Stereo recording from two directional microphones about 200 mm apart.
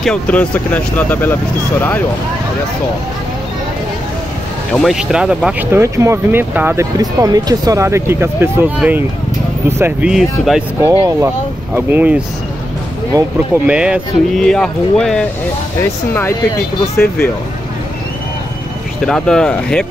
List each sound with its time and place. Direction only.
0.0 s speech: 5° left (ahead or behind)
4.7 s speech: centre (ahead or behind)
10.8 s speech: 15° right (ahead or behind)
13.7 s speech: 5° right (ahead or behind)
19.0 s speech: 5° left (ahead or behind)